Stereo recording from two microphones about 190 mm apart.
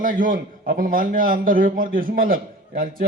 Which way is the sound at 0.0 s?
45° right (ahead or behind).